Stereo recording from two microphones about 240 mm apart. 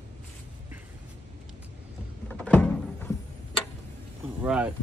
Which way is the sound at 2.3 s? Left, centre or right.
Centre.